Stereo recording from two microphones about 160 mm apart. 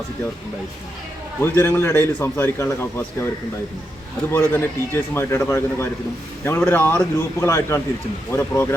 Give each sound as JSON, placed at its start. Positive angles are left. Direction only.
{"t": 1.4, "sound": "speech", "side_deg": 15}
{"t": 4.3, "sound": "speech", "side_deg": 15}